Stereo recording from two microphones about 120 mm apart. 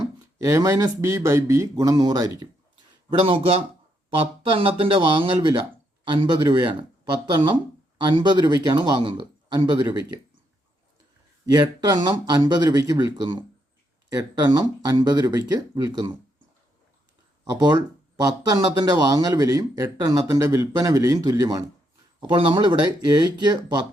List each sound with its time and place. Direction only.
0.4 s speech: 25° right (ahead or behind)
3.1 s speech: 50° right (ahead or behind)
11.5 s speech: 35° right (ahead or behind)
17.4 s speech: 35° right (ahead or behind)
22.2 s speech: 45° right (ahead or behind)